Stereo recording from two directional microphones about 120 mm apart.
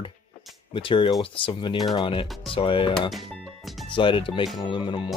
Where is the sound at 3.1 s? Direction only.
Centre (ahead or behind).